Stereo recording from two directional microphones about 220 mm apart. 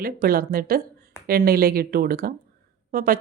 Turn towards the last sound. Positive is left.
turn(degrees=-40)  # may be behind; listen again after turning